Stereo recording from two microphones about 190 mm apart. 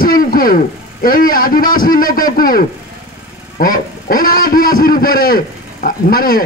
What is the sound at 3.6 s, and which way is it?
A man's voice, 45° left (ahead or behind).